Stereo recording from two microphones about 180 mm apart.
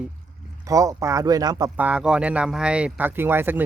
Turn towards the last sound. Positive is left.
turn(degrees=-10)  # may be behind; listen again after turning